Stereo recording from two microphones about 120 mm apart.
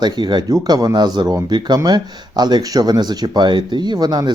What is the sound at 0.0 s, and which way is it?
Speech, 35° right (ahead or behind).